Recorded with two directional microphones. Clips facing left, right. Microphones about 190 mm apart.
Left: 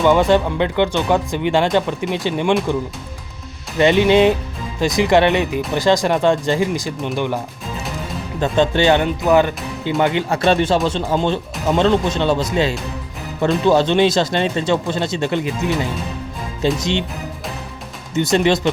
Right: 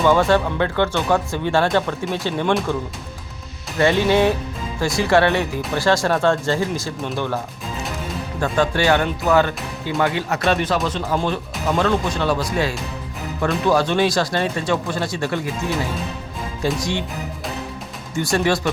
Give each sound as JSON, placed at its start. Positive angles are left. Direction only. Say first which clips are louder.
{"t": 0.0, "sound": "speech", "louder": "left 2 dB", "side_deg": 15}
{"t": 3.8, "sound": "speech", "louder": "left 4 dB", "side_deg": 20}
{"t": 8.4, "sound": "speech", "louder": "left 4 dB", "side_deg": 25}
{"t": 16.6, "sound": "speech", "louder": "left 4 dB", "side_deg": 20}
{"t": 18.1, "sound": "speech", "louder": "left 4 dB", "side_deg": 20}